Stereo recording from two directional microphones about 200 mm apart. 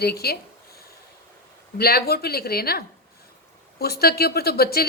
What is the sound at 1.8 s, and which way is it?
A woman's voice, 50° left (ahead or behind).